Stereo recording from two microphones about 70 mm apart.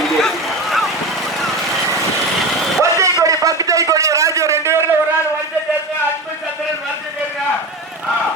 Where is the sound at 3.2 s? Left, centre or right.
Right.